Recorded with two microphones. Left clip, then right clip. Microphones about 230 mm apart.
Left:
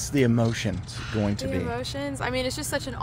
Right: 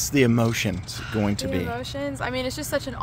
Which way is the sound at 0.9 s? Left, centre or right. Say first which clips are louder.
Right 2 dB; centre.